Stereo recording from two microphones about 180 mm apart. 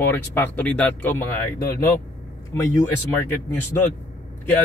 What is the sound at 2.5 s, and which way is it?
Speech, 10° left (ahead or behind).